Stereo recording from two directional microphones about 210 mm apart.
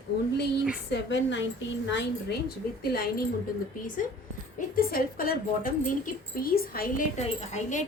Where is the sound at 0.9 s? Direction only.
60° left (ahead or behind).